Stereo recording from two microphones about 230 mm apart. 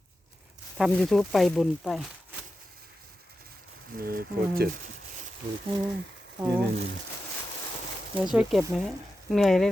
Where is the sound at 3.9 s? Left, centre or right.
Right.